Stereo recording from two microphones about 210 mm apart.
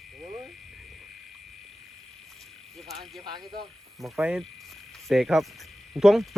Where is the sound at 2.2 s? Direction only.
Centre (ahead or behind).